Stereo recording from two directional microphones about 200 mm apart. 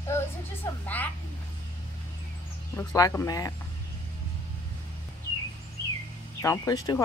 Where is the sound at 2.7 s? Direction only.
15° left (ahead or behind).